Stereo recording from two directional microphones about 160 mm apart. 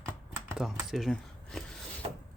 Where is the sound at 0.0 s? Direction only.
5° right (ahead or behind).